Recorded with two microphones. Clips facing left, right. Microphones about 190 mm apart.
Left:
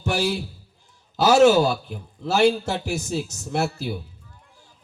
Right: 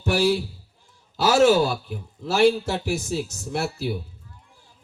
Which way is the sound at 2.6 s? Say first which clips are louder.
Right 1 dB; 50° left (ahead or behind).